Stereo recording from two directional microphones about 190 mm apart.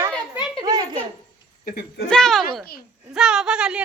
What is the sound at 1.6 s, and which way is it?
Speech, 50° left (ahead or behind).